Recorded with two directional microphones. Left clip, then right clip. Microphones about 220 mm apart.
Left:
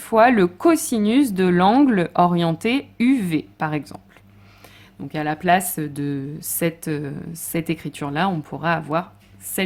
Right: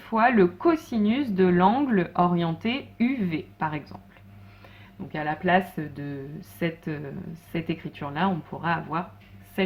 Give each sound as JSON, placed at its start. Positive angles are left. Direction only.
{"t": 0.0, "sound": "speech", "side_deg": 40}
{"t": 5.1, "sound": "speech", "side_deg": 45}